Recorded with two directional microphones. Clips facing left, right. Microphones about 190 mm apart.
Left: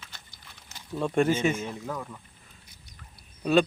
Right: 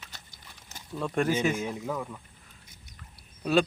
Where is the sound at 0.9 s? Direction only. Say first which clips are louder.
Left 3 dB; centre (ahead or behind).